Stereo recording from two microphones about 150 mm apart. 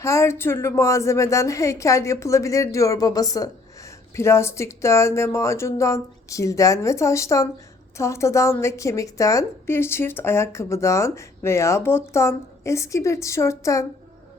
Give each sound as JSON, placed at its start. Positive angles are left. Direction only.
{"t": 0.0, "sound": "a woman's voice", "side_deg": 20}